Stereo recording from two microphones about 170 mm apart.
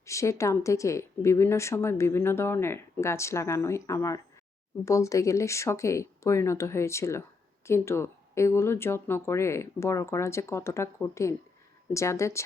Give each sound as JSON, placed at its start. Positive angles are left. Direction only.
{"t": 0.0, "sound": "a woman's voice", "side_deg": 15}